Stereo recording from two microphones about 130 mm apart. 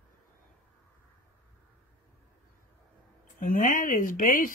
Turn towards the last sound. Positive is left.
turn(degrees=90)